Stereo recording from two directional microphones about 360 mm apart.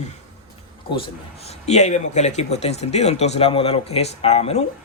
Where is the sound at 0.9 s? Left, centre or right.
Centre.